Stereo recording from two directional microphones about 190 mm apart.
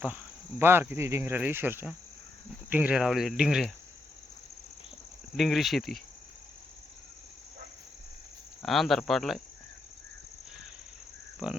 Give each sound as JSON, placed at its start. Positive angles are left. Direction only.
{"t": 0.6, "sound": "speech", "side_deg": -10}
{"t": 5.4, "sound": "speech", "side_deg": 0}
{"t": 8.6, "sound": "speech", "side_deg": 0}
{"t": 11.4, "sound": "speech", "side_deg": -5}